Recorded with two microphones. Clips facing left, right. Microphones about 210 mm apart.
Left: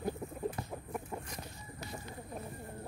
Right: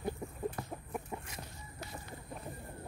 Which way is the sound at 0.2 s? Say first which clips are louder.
Left 1 dB; 5° left (ahead or behind).